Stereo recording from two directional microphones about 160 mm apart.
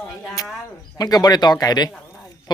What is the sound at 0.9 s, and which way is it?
Speech, 25° left (ahead or behind).